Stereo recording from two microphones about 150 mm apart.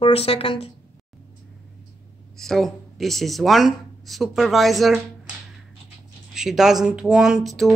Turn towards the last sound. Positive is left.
turn(degrees=0)  # may be behind; listen again after turning